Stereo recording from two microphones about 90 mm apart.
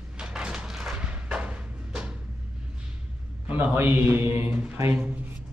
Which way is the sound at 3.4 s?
20° right (ahead or behind).